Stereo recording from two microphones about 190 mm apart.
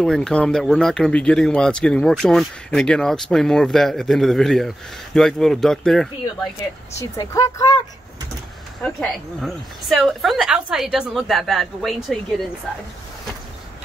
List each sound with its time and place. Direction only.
0.0 s speech: 5° left (ahead or behind)
7.0 s speech: 15° left (ahead or behind)
8.8 s speech: centre (ahead or behind)